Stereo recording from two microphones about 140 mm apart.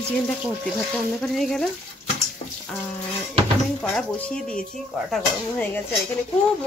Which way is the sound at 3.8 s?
10° left (ahead or behind).